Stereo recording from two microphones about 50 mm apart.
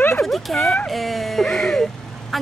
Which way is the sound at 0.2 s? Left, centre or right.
Centre.